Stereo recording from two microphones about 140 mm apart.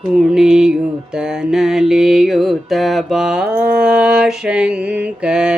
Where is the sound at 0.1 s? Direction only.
5° right (ahead or behind).